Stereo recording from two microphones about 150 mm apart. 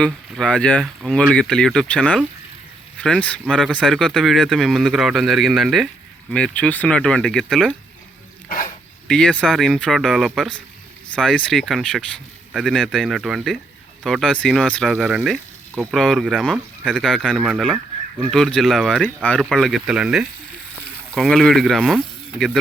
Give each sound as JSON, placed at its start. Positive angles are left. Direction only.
{"t": 0.0, "sound": "speech", "side_deg": 5}
{"t": 8.4, "sound": "dog", "side_deg": 65}
{"t": 9.0, "sound": "speech", "side_deg": 5}